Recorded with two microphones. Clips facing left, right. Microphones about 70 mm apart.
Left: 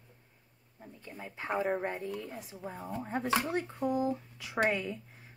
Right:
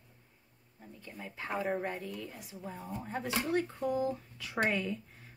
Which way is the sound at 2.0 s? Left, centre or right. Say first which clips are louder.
Left 4 dB; left.